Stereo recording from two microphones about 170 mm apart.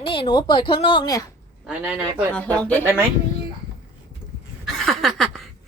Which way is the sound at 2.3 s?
5° left (ahead or behind).